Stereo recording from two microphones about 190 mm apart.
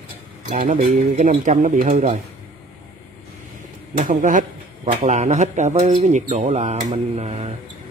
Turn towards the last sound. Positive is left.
turn(degrees=-35)  # may be behind; listen again after turning